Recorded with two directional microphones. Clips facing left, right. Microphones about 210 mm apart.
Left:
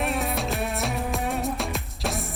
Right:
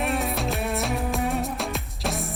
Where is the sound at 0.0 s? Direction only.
Centre (ahead or behind).